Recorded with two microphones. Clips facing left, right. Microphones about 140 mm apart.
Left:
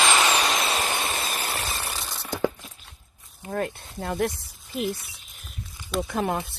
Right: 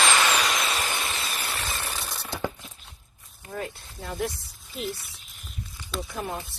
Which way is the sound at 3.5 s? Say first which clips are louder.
Left 6 dB; 60° left (ahead or behind).